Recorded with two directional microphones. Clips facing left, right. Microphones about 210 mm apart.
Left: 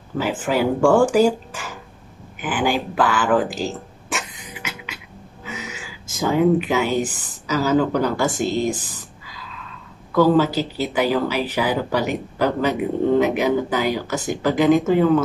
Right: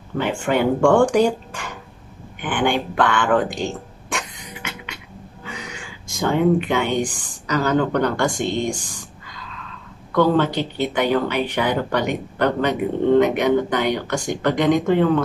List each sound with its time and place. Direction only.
0.2 s speech: 5° left (ahead or behind)
2.4 s a sound: 5° left (ahead or behind)
10.1 s speech: 5° left (ahead or behind)